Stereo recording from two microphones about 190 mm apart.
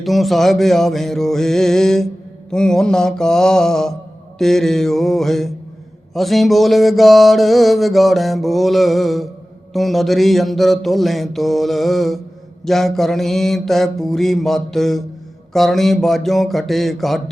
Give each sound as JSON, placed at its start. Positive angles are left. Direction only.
{"t": 0.0, "sound": "mantra", "side_deg": 0}